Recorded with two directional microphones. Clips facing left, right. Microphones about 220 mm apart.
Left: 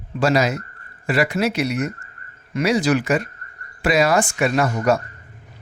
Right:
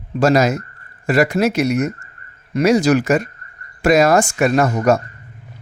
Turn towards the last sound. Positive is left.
turn(degrees=-45)  # may be behind; listen again after turning